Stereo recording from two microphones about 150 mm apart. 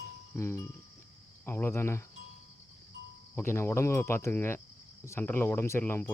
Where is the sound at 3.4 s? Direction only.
15° left (ahead or behind).